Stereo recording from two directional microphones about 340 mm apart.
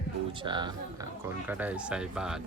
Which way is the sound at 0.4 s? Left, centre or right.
Centre.